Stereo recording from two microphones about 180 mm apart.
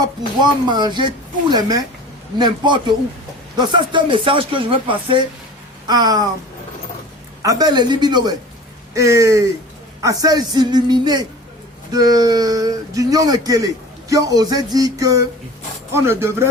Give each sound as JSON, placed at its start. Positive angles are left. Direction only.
{"t": 0.4, "sound": "speech", "side_deg": -25}
{"t": 7.4, "sound": "speech", "side_deg": -20}